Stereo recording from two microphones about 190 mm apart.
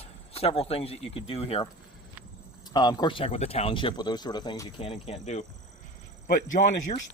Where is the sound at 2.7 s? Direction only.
20° left (ahead or behind).